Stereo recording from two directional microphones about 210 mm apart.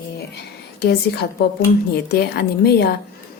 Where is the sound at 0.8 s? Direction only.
50° left (ahead or behind).